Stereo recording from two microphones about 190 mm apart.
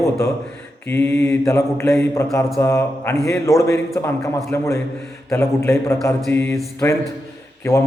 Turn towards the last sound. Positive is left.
turn(degrees=15)  # may be behind; listen again after turning